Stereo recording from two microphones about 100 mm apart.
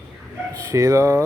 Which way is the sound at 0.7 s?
30° right (ahead or behind).